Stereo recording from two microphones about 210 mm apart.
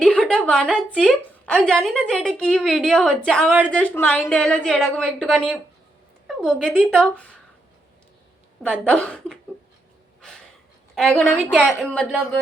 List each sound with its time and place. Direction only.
0.0 s a woman's voice: 5° left (ahead or behind)
8.8 s a woman's voice: 5° left (ahead or behind)
10.9 s a woman's voice: centre (ahead or behind)